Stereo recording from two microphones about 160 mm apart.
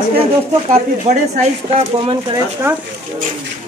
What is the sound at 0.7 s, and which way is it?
Speech, 45° right (ahead or behind).